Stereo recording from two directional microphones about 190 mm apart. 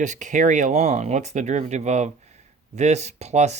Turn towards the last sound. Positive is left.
turn(degrees=-35)  # may be behind; listen again after turning